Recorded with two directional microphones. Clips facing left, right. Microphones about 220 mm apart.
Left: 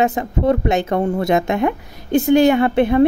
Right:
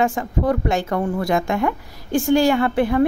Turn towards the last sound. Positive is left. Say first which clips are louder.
# left 4 dB
turn(degrees=25)  # may be behind; listen again after turning